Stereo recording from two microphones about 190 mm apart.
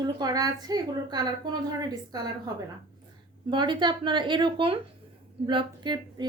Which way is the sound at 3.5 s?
25° right (ahead or behind).